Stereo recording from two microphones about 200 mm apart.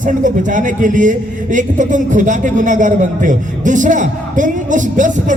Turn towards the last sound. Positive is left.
turn(degrees=-40)  # may be behind; listen again after turning